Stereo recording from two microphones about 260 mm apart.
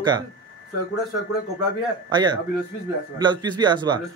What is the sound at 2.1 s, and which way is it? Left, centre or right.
Speech, centre.